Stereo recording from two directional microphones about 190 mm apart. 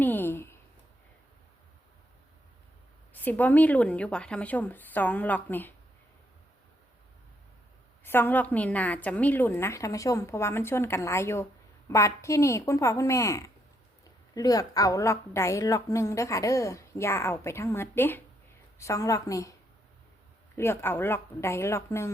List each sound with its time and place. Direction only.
0.0 s a sound: 10° left (ahead or behind)
3.1 s a woman's voice: 10° left (ahead or behind)
8.0 s a woman's voice: 10° left (ahead or behind)
20.6 s a woman's voice: 15° left (ahead or behind)